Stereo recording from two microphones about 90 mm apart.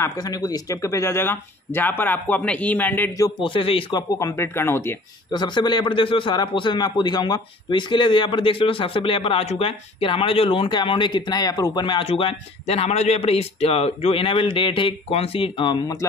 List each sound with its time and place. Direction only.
0.2 s speech: 50° left (ahead or behind); by 3.1 s 20° left (ahead or behind)
3.3 s a man's voice: 70° left (ahead or behind)
3.9 s speech: 40° left (ahead or behind)
5.3 s a man's voice: 55° left (ahead or behind)
11.8 s a man's voice: 75° left (ahead or behind)
16.0 s speech: 35° left (ahead or behind)